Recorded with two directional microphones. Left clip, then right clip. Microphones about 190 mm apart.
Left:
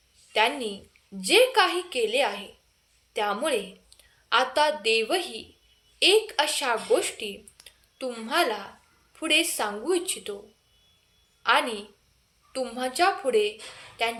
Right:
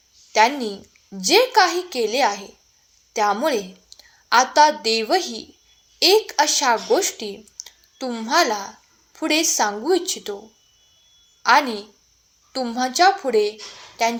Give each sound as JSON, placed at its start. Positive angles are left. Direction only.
{"t": 0.3, "sound": "a woman's voice", "side_deg": -20}
{"t": 11.4, "sound": "a woman's voice", "side_deg": -20}